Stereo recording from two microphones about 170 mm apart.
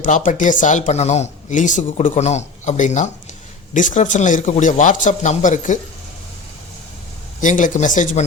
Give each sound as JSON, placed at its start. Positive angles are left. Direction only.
{"t": 0.0, "sound": "speech", "side_deg": 50}
{"t": 7.4, "sound": "speech", "side_deg": 50}